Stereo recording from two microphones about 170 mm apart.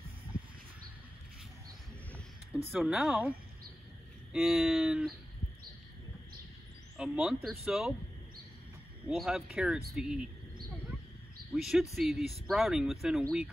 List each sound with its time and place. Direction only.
2.7 s speech: centre (ahead or behind)
7.0 s speech: 5° right (ahead or behind)
9.0 s speech: centre (ahead or behind)
11.5 s speech: centre (ahead or behind)